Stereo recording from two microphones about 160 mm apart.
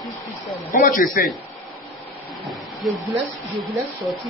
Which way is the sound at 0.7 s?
60° left (ahead or behind).